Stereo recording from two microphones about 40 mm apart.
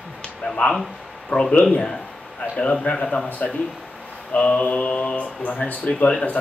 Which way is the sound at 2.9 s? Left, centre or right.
Centre.